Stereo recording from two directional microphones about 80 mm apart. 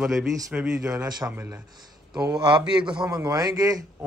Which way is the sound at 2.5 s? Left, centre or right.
Right.